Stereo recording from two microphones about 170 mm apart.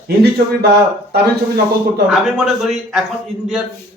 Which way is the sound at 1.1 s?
65° right (ahead or behind).